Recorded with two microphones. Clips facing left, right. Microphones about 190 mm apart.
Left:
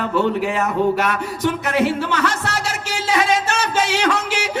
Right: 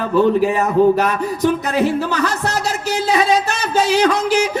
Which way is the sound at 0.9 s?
40° right (ahead or behind).